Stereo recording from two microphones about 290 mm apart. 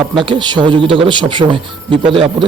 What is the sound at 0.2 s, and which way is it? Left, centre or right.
Speech, centre.